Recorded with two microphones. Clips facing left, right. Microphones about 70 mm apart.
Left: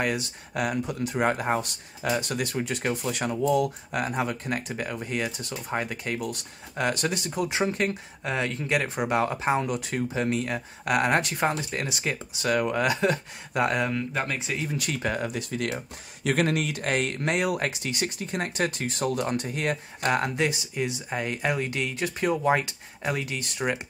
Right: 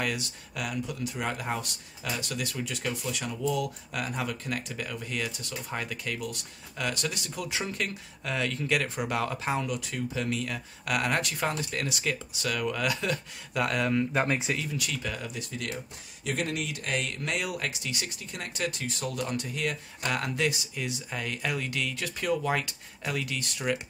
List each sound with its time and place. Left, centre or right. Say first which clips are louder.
0.0 s speech: left 4 dB; left
14.2 s speech: right 3 dB; centre
14.6 s speech: left 4 dB; left